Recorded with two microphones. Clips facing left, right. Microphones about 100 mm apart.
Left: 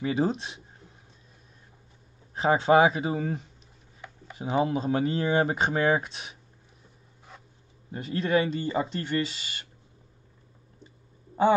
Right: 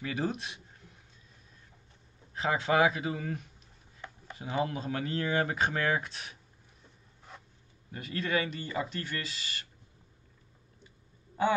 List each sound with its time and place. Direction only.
0.0 s speech: 25° left (ahead or behind)
2.3 s speech: 30° left (ahead or behind)
7.3 s zipper: centre (ahead or behind)
7.9 s speech: 25° left (ahead or behind)